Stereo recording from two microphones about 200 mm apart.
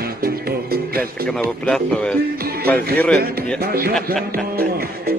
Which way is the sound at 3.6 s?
50° right (ahead or behind).